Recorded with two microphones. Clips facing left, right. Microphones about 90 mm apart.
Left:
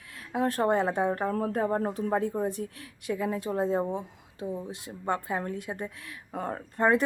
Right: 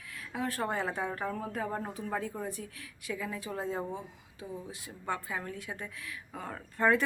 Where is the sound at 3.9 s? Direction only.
60° left (ahead or behind).